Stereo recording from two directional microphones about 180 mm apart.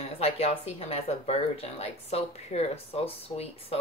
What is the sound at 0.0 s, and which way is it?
Speech, 35° left (ahead or behind).